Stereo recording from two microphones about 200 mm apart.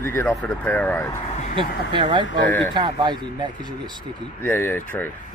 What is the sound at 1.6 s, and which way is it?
Speech, 25° right (ahead or behind).